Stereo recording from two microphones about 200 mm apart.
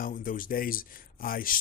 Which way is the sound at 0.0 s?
40° left (ahead or behind).